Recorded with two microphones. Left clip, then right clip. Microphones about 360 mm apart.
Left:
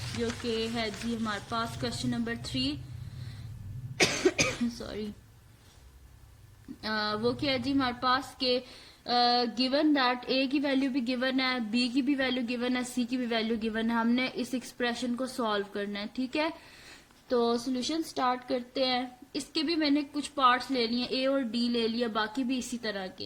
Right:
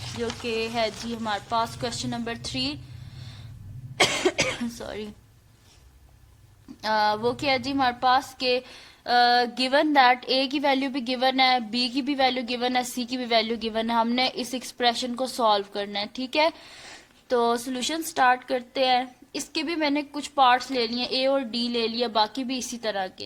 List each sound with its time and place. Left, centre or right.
0.4 s a woman's voice: centre
4.0 s cough: centre
6.8 s a woman's voice: centre